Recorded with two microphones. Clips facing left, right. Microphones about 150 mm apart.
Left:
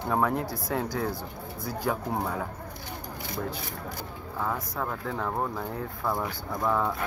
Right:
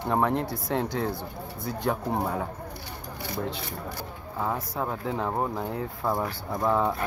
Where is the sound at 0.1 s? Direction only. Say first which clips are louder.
Right 2 dB; centre (ahead or behind).